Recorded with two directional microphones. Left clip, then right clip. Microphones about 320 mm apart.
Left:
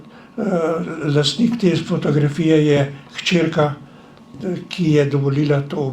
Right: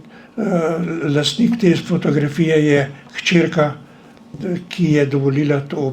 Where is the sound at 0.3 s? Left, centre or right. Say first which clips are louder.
Right 1 dB; right.